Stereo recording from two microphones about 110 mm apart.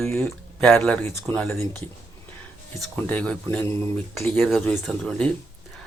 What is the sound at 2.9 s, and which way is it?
Speech, 15° left (ahead or behind).